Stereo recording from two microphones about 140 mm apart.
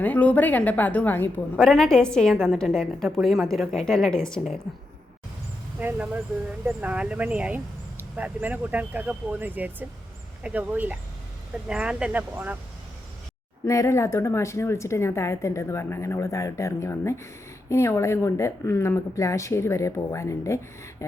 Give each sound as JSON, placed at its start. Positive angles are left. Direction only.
{"t": 0.0, "sound": "a woman's voice", "side_deg": 10}
{"t": 1.5, "sound": "a woman's voice", "side_deg": 0}
{"t": 5.8, "sound": "speech", "side_deg": -10}
{"t": 13.7, "sound": "a woman's voice", "side_deg": 20}